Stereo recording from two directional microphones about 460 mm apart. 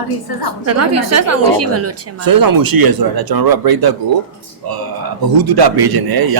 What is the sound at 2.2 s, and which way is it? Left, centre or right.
A man's voice, right.